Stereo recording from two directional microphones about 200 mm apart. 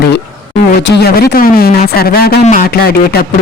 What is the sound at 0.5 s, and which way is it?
Speech, 60° left (ahead or behind).